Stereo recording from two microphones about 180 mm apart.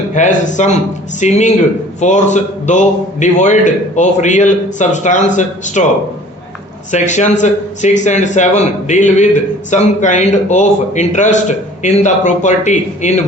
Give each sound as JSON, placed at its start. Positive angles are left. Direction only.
{"t": 0.1, "sound": "a man's voice", "side_deg": 40}
{"t": 6.9, "sound": "a man's voice", "side_deg": 40}